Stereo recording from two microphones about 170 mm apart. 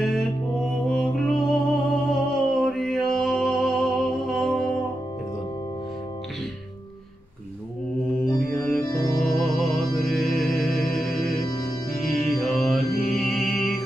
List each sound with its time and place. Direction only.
0.0 s music: centre (ahead or behind)
8.5 s organ: 5° left (ahead or behind)
8.8 s organ: 20° left (ahead or behind)
9.4 s music: centre (ahead or behind)
12.4 s music: centre (ahead or behind)